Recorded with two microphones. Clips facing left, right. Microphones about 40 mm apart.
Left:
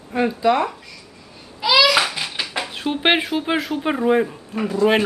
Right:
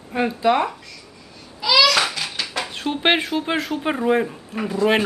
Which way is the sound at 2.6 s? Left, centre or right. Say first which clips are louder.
Left 1 dB; centre.